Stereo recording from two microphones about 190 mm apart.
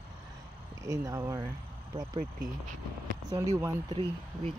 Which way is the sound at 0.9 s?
15° right (ahead or behind).